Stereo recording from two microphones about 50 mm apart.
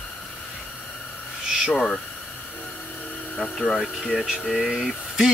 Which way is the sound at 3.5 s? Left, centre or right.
Centre.